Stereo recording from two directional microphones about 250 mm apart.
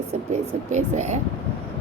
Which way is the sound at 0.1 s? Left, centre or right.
Right.